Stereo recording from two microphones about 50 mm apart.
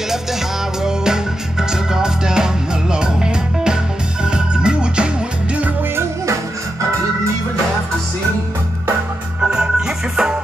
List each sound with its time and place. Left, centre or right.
0.8 s music: centre
9.4 s music: centre